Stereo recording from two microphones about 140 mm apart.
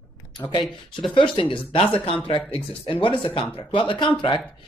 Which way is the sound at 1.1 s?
40° left (ahead or behind).